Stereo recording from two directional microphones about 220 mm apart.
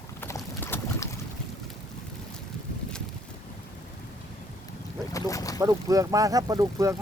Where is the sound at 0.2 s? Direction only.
10° left (ahead or behind).